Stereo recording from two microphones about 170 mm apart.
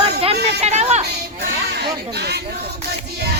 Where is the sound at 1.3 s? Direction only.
75° right (ahead or behind).